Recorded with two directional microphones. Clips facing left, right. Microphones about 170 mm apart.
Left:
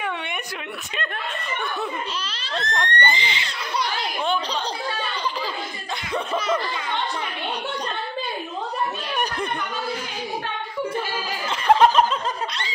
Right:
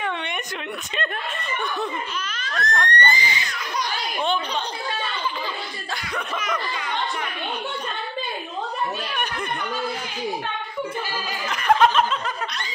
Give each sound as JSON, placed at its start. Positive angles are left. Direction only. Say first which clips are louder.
{"t": 2.2, "sound": "a child's voice", "louder": "right 1 dB", "side_deg": 25}
{"t": 6.1, "sound": "a child's voice", "louder": "left 5 dB", "side_deg": 30}
{"t": 11.4, "sound": "a sound", "louder": "left 2 dB", "side_deg": 30}